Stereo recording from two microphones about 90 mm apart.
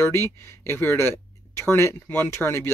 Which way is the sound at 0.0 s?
30° left (ahead or behind).